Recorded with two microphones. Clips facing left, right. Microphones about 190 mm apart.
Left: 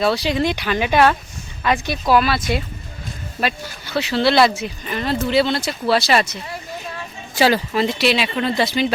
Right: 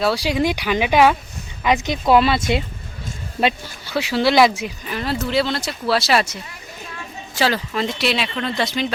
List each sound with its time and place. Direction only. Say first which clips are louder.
0.0 s speech: even; 10° right (ahead or behind); by 2.4 s 25° right (ahead or behind)
3.8 s speech: left 1 dB; 10° right (ahead or behind)
7.3 s speech: left 4 dB; 10° left (ahead or behind)